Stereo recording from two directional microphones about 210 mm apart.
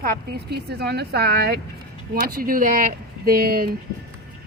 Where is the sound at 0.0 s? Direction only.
50° right (ahead or behind).